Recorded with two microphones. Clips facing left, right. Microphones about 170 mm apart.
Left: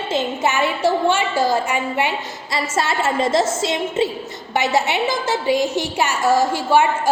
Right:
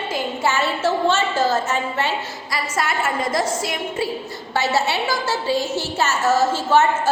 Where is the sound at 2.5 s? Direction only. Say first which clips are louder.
Left 3 dB; 25° left (ahead or behind).